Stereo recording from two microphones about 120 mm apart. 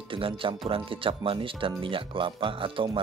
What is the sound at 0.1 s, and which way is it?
Speech, 45° right (ahead or behind).